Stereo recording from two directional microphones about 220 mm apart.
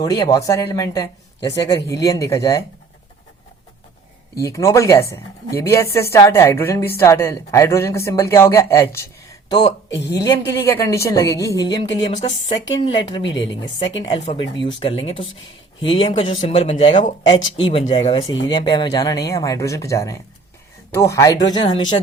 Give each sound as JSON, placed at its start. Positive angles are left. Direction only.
{"t": 0.0, "sound": "speech", "side_deg": 15}
{"t": 4.4, "sound": "speech", "side_deg": 15}
{"t": 13.0, "sound": "speech", "side_deg": 20}